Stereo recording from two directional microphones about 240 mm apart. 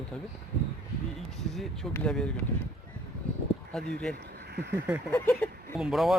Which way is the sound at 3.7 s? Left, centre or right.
Centre.